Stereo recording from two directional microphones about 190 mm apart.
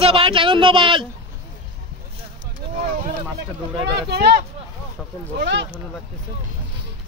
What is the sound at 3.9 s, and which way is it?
Speech, 60° right (ahead or behind).